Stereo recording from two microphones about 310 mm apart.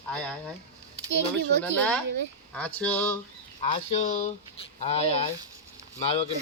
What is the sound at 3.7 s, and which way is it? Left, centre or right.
Speech, left.